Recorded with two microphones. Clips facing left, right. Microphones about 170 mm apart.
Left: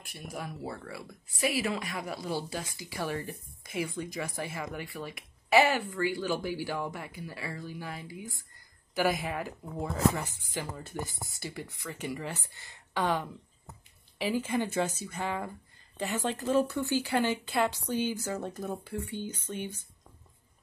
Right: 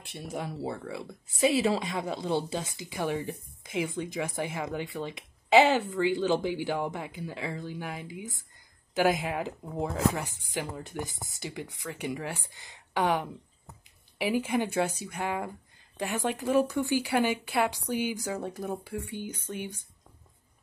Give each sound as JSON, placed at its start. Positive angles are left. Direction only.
{"t": 0.3, "sound": "speech", "side_deg": -30}